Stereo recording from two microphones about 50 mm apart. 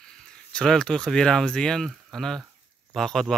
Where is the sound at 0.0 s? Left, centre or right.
Centre.